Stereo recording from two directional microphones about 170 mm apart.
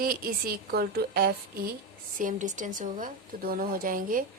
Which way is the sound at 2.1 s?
50° right (ahead or behind).